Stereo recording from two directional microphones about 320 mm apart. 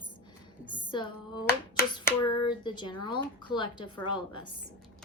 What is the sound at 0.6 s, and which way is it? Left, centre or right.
Music, right.